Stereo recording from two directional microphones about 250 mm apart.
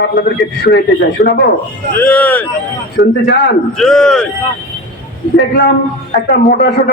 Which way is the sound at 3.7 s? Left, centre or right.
Centre.